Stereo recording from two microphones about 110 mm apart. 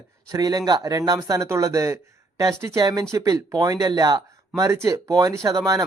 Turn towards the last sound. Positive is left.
turn(degrees=-30)  # may be behind; listen again after turning